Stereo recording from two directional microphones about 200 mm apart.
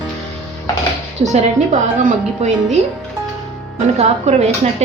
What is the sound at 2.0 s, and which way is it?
Speech, 35° right (ahead or behind).